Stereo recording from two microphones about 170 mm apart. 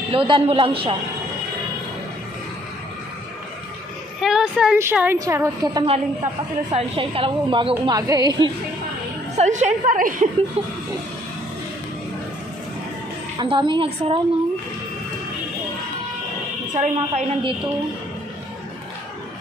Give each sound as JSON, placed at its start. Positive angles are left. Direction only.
{"t": 0.1, "sound": "a woman's voice", "side_deg": -30}
{"t": 4.2, "sound": "a woman's voice", "side_deg": -5}
{"t": 6.7, "sound": "a woman's voice", "side_deg": -30}
{"t": 9.4, "sound": "a woman's voice", "side_deg": -45}
{"t": 13.4, "sound": "a woman's voice", "side_deg": -25}
{"t": 16.7, "sound": "a woman's voice", "side_deg": -40}